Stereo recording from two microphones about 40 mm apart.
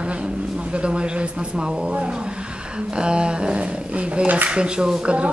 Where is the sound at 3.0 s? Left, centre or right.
Right.